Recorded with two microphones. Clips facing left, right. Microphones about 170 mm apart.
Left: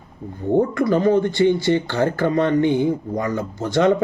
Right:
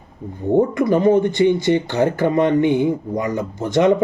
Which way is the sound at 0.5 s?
20° right (ahead or behind).